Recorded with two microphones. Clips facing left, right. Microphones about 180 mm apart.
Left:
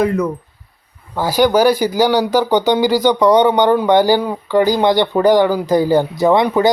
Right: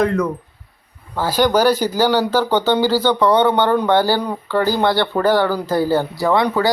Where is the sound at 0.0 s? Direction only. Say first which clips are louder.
Left 1 dB; 5° left (ahead or behind).